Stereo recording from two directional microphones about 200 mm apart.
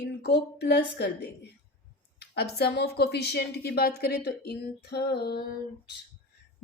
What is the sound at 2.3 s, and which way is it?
Speech, 55° left (ahead or behind).